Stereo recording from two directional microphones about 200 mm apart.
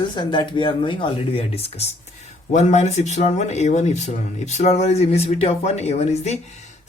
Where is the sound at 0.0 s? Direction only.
25° left (ahead or behind).